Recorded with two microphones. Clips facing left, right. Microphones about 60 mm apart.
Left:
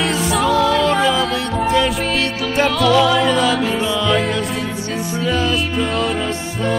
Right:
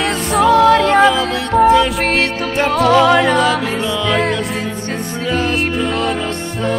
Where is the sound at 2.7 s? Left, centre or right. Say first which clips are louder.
Right 5 dB; right.